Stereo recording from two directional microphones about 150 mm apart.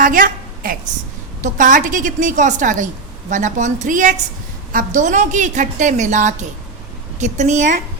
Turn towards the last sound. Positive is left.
turn(degrees=-55)  # may be behind; listen again after turning